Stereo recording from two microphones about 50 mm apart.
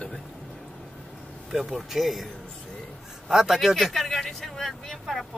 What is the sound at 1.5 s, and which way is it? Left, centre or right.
Speech, centre.